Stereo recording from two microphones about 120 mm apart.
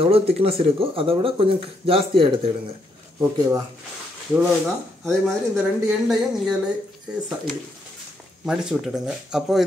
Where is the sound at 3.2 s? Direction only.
25° right (ahead or behind).